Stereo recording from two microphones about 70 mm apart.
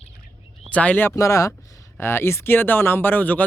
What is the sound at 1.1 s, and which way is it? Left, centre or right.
Speech, left.